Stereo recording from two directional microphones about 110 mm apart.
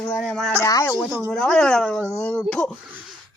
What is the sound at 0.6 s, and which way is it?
Speech, 30° left (ahead or behind).